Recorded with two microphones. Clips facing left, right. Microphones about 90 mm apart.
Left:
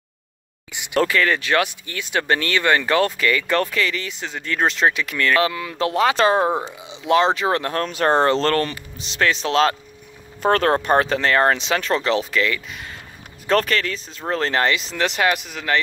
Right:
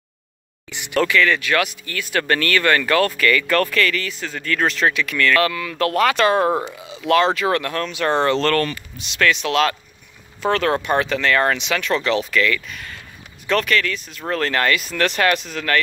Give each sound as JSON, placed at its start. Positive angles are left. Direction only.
{"t": 0.7, "sound": "speech", "side_deg": 15}
{"t": 1.0, "sound": "speech", "side_deg": 35}
{"t": 13.5, "sound": "speech", "side_deg": 35}